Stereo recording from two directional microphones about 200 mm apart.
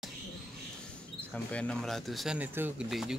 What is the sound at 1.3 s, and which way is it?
Speech, 5° left (ahead or behind).